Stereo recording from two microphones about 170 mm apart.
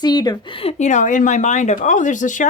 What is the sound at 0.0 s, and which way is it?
Speech, 25° left (ahead or behind).